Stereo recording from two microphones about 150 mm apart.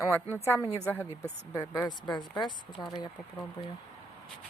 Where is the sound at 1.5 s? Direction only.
25° left (ahead or behind).